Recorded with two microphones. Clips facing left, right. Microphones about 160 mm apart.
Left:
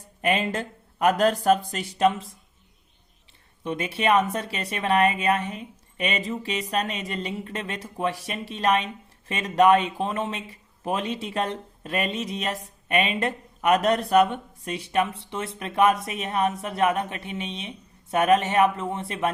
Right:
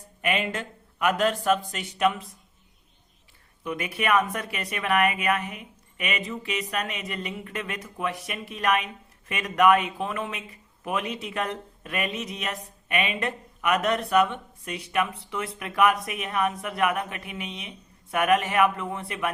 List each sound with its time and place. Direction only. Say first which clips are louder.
0.2 s speech: left 3 dB; 35° left (ahead or behind)
3.6 s speech: left 3 dB; 30° left (ahead or behind)